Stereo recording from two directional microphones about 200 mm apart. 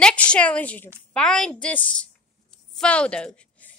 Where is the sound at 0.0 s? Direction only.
5° left (ahead or behind).